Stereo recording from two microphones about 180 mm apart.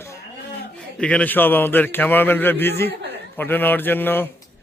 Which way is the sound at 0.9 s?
5° left (ahead or behind).